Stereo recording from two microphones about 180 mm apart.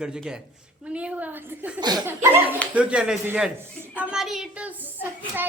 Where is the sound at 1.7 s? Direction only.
20° right (ahead or behind).